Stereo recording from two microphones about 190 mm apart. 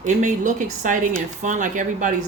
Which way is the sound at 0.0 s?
40° right (ahead or behind).